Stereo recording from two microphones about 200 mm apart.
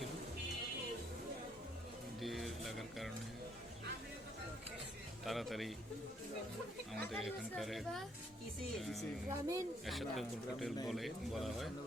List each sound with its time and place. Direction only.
2.2 s music: centre (ahead or behind)
5.2 s speech: centre (ahead or behind)
7.1 s speech: centre (ahead or behind)
9.3 s speech: 15° right (ahead or behind)
9.8 s speech: centre (ahead or behind)